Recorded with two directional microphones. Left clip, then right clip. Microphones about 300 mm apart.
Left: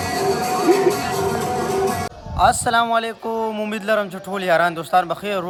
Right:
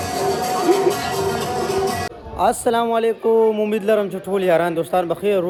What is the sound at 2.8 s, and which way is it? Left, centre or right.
A man's voice, left.